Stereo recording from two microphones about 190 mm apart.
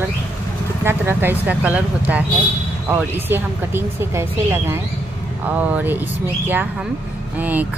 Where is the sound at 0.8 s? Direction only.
10° right (ahead or behind).